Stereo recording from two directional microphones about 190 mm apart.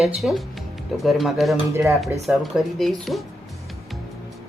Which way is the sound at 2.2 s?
Centre (ahead or behind).